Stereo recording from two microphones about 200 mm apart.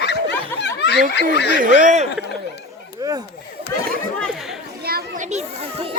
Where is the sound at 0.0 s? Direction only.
55° left (ahead or behind).